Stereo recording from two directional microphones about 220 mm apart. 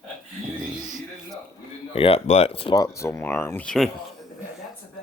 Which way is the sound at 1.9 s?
25° left (ahead or behind).